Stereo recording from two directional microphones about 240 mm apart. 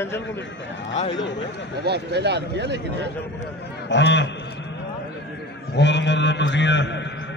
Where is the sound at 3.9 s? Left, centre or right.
Left.